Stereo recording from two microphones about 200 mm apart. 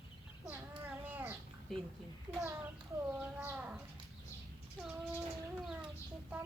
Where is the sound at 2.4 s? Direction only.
15° right (ahead or behind).